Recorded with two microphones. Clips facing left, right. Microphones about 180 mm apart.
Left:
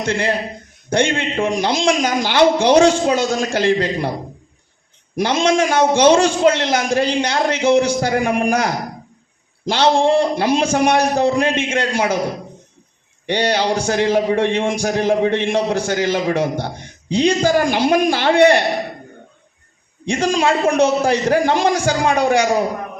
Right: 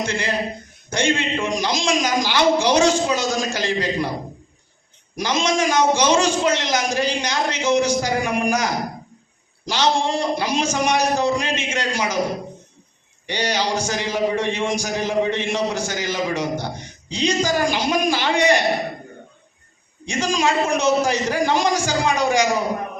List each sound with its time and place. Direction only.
0.0 s a man's voice: 55° left (ahead or behind)
5.1 s a man's voice: 55° left (ahead or behind)
13.2 s a man's voice: 60° left (ahead or behind)
20.1 s a man's voice: 55° left (ahead or behind)